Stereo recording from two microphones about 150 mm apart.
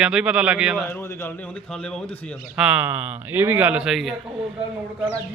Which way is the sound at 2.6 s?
10° right (ahead or behind).